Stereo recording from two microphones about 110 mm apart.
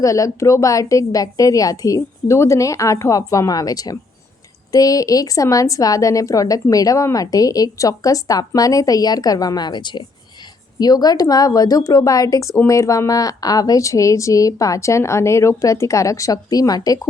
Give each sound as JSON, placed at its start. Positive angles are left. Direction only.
{"t": 0.0, "sound": "a woman's voice", "side_deg": 30}